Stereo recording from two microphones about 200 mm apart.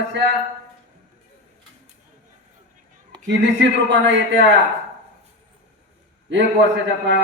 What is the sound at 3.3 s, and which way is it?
A man's voice, 65° right (ahead or behind).